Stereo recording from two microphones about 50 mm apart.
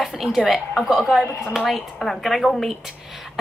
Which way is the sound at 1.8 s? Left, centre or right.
Centre.